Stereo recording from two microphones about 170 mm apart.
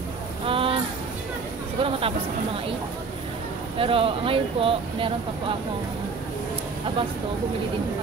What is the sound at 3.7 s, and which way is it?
Speech, 30° right (ahead or behind).